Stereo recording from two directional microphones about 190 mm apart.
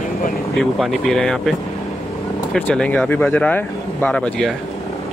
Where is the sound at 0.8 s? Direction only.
Centre (ahead or behind).